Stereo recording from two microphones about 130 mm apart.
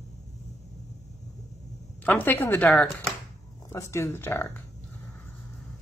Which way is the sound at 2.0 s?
15° left (ahead or behind).